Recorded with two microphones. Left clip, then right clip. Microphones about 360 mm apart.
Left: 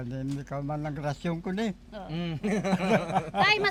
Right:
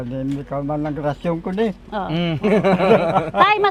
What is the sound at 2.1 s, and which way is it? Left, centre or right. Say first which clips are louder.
Speech: right 13 dB; centre.